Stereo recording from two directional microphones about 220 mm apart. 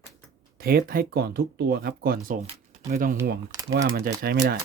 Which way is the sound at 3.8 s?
45° right (ahead or behind).